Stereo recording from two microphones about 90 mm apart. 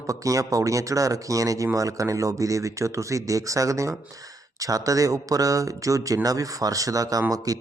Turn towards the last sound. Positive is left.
turn(degrees=-40)  # may be behind; listen again after turning